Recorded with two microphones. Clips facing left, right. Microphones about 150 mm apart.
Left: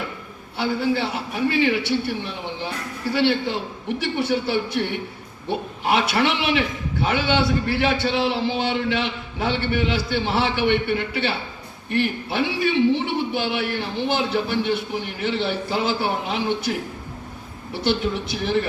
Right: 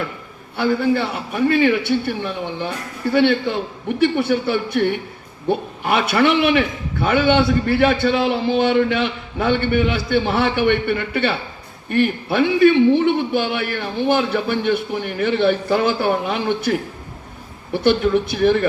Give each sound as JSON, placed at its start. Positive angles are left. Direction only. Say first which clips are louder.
{"t": 0.5, "sound": "a man's voice", "louder": "right 4 dB", "side_deg": -55}
{"t": 17.8, "sound": "a man's voice", "louder": "right 7 dB", "side_deg": -55}